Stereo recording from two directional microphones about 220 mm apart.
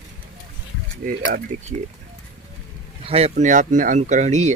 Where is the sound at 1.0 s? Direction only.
40° right (ahead or behind).